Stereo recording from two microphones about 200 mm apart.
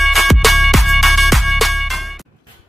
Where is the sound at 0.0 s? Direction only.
Centre (ahead or behind).